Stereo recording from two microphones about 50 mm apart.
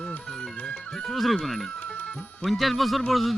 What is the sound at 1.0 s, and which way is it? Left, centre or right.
Speech, centre.